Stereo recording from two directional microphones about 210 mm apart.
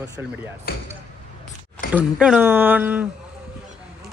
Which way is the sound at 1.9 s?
5° right (ahead or behind).